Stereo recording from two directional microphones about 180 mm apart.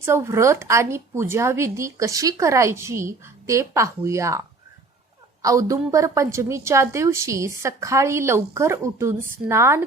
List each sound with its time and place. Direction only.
0.0 s a woman's voice: 15° right (ahead or behind)